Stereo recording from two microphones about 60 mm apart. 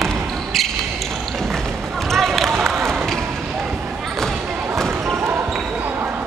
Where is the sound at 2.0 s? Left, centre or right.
Centre.